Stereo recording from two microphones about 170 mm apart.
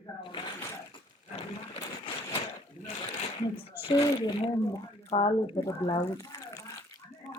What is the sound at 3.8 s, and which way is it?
Speech, 30° left (ahead or behind).